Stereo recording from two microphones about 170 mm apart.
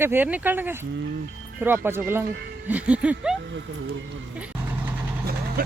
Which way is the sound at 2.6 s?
10° right (ahead or behind).